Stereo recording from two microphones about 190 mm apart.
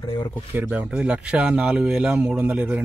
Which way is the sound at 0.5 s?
10° right (ahead or behind).